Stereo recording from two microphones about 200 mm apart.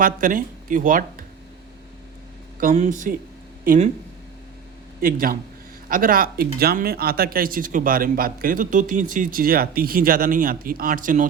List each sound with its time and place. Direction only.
0.0 s speech: 40° right (ahead or behind)
2.6 s speech: 40° right (ahead or behind)
4.9 s a man's voice: 45° right (ahead or behind)